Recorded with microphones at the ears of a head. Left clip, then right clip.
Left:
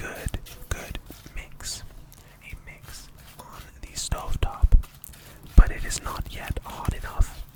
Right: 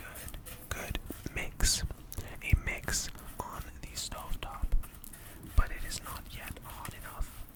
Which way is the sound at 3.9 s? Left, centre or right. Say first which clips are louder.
Left 8 dB; left.